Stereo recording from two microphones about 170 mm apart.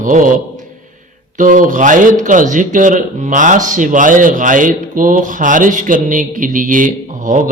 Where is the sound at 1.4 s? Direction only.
50° right (ahead or behind).